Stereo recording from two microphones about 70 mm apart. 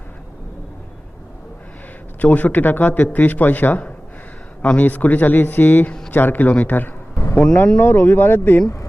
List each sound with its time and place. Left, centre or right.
2.2 s a man's voice: left